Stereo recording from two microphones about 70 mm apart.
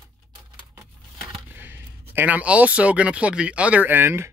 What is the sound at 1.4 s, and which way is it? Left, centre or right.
A man's voice, right.